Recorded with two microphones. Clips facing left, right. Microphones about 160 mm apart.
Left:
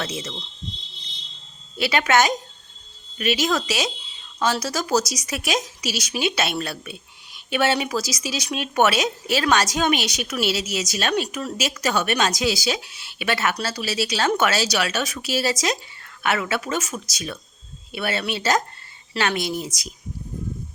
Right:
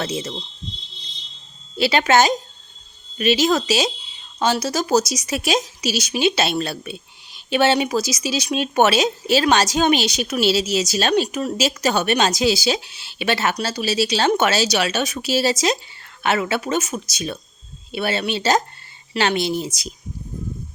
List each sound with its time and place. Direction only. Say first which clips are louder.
0.0 s speech: right 4 dB; 30° right (ahead or behind)
1.8 s speech: right 3 dB; 30° right (ahead or behind)